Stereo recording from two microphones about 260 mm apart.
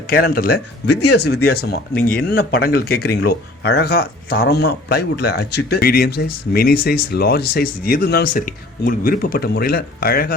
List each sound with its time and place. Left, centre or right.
0.1 s speech: left